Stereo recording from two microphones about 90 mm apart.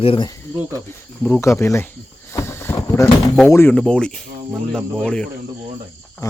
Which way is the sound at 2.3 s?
30° left (ahead or behind).